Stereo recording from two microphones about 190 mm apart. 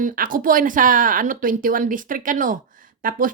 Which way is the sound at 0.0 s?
45° right (ahead or behind).